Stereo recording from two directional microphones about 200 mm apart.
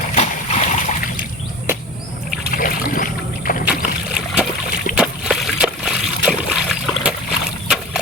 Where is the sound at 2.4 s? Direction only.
45° left (ahead or behind).